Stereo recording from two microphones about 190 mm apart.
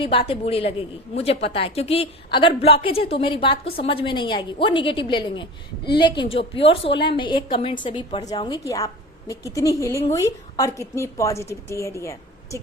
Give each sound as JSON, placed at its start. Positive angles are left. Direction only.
{"t": 0.0, "sound": "a woman's voice", "side_deg": 30}